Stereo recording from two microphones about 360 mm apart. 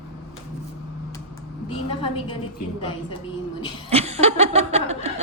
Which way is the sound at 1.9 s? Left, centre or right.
Centre.